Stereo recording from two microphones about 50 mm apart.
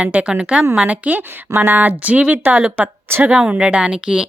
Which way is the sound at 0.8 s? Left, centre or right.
Right.